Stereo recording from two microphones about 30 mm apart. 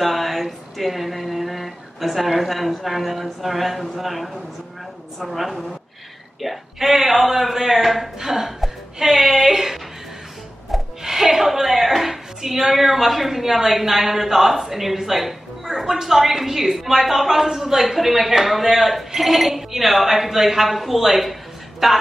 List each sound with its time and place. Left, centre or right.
0.0 s a sound: centre
3.9 s a man's voice: centre
11.0 s a woman's voice: centre